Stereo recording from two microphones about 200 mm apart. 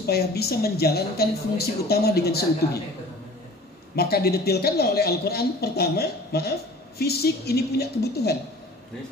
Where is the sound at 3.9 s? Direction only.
50° left (ahead or behind).